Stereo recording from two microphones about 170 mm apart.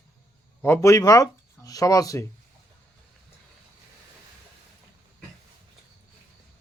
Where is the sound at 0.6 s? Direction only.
15° left (ahead or behind).